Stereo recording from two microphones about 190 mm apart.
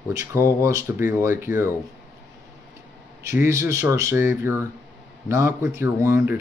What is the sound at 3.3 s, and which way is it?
Speech, 15° right (ahead or behind).